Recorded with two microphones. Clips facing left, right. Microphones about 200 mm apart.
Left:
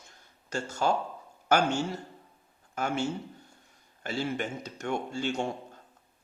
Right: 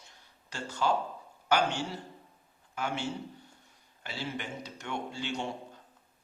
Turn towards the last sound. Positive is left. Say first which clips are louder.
# left 5 dB
turn(degrees=45)  # may be behind; listen again after turning